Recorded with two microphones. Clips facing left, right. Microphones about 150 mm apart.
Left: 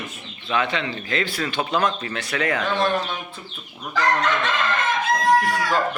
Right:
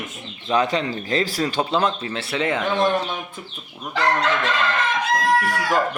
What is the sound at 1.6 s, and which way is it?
Speech, 25° right (ahead or behind).